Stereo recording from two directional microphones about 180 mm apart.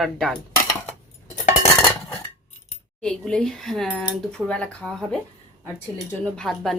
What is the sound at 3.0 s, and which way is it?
Speech, 5° left (ahead or behind).